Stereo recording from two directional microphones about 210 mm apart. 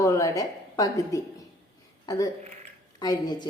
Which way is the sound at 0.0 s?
15° left (ahead or behind).